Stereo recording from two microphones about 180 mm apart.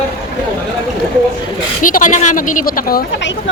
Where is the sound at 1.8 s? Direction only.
45° left (ahead or behind).